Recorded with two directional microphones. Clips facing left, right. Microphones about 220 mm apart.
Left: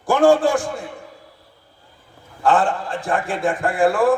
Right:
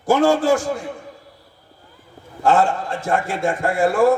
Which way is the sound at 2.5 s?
25° right (ahead or behind).